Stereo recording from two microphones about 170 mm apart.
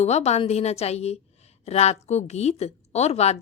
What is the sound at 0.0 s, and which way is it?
A woman's voice, 40° left (ahead or behind).